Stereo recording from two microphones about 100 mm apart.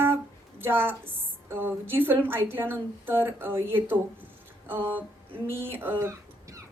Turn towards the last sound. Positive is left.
turn(degrees=-30)  # may be behind; listen again after turning